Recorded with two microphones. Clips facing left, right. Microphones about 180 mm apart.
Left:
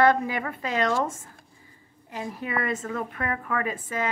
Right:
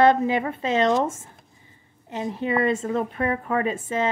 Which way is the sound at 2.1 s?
25° right (ahead or behind).